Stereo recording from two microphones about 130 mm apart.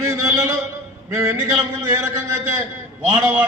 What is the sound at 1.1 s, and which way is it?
Speech, 20° right (ahead or behind).